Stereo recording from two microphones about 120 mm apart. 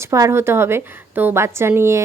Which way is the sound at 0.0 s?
25° right (ahead or behind).